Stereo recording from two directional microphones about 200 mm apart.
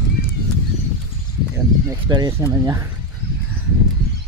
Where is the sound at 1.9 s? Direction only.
20° right (ahead or behind).